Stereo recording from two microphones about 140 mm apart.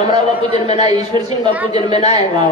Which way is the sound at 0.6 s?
50° left (ahead or behind).